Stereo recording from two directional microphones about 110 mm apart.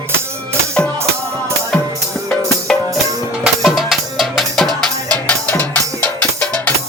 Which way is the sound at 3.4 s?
5° right (ahead or behind).